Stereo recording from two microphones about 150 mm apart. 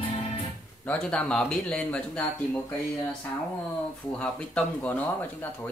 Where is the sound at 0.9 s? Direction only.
5° left (ahead or behind).